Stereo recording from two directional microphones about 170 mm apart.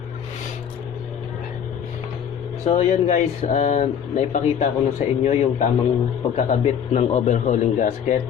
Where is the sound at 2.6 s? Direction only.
40° left (ahead or behind).